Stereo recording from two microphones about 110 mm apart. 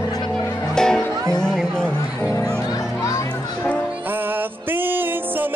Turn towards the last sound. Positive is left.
turn(degrees=-20)  # may be behind; listen again after turning